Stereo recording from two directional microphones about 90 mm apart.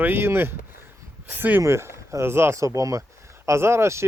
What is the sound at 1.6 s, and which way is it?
Speech, 30° right (ahead or behind).